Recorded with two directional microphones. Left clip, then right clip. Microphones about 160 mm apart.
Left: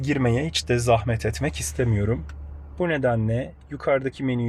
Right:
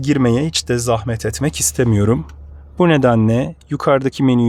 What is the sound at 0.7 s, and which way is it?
Speech, 40° right (ahead or behind).